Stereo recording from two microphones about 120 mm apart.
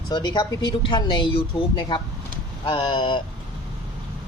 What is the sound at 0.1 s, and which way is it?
Speech, 35° left (ahead or behind).